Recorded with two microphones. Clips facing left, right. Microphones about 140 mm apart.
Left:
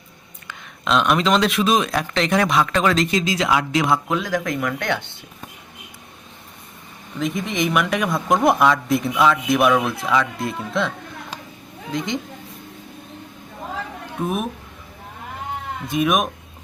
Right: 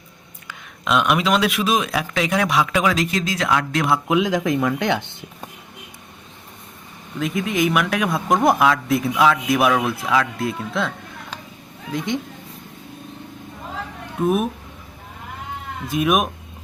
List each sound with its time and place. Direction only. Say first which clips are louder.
0.4 s a man's voice: even; 5° right (ahead or behind)
4.1 s speech: right 4 dB; 15° right (ahead or behind)
7.2 s a man's voice: right 2 dB; centre (ahead or behind)
14.2 s a man's voice: right 5 dB; centre (ahead or behind)
15.9 s a man's voice: right 1 dB; centre (ahead or behind)